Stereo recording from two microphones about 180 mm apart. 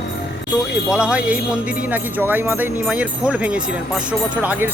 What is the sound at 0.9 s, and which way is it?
Speech, 5° right (ahead or behind).